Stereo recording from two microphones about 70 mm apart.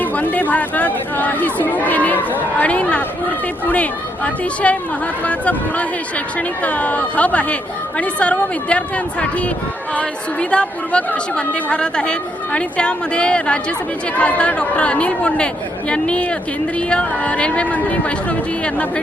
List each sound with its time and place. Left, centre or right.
0.0 s a woman's voice: left
10.5 s a woman's voice: centre